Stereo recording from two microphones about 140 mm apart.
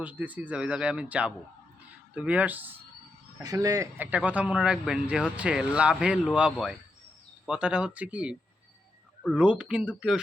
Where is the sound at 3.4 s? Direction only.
25° right (ahead or behind).